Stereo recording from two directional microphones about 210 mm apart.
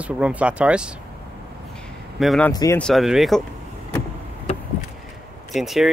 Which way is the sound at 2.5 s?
15° left (ahead or behind).